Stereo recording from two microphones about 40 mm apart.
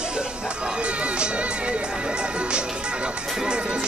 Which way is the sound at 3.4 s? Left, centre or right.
Right.